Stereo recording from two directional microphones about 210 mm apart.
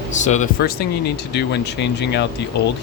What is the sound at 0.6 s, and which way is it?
Speech, 50° left (ahead or behind).